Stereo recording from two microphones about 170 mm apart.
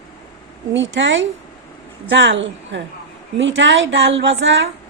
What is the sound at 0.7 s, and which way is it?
A woman's voice, 90° right.